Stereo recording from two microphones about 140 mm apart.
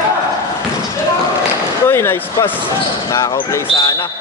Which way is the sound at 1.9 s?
20° left (ahead or behind).